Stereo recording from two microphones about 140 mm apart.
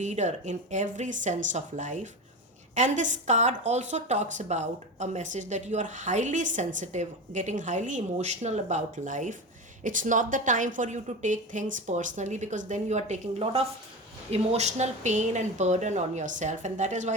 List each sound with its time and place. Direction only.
0.0 s a woman's voice: 55° right (ahead or behind)